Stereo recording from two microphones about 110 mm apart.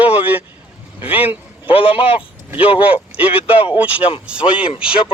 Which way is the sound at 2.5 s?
15° right (ahead or behind).